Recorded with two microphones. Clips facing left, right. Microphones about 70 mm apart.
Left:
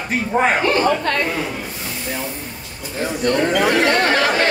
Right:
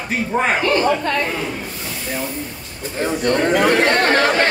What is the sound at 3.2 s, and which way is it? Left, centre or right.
Speech, right.